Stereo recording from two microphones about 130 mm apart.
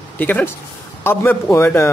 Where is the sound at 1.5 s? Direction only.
20° left (ahead or behind).